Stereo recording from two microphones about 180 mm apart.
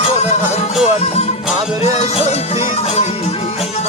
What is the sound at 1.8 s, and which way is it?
Music, 35° left (ahead or behind).